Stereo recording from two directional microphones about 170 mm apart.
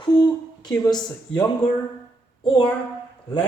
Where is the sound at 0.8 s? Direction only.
25° left (ahead or behind).